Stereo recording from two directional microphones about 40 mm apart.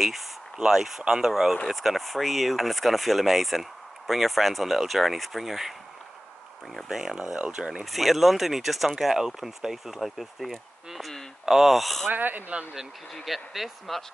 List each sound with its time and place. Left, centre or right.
0.7 s speech: centre
6.9 s speech: centre
7.8 s speech: centre
12.1 s speech: right
13.1 s speech: centre